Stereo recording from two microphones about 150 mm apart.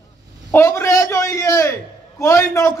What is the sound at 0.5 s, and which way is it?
A man's voice, 15° left (ahead or behind).